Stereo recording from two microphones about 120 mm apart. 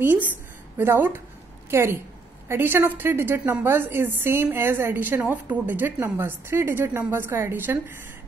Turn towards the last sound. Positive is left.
turn(degrees=-15)  # may be behind; listen again after turning